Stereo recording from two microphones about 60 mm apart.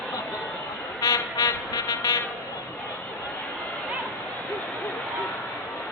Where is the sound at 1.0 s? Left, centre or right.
Left.